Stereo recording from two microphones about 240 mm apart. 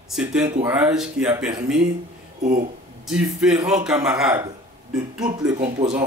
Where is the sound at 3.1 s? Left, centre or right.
Centre.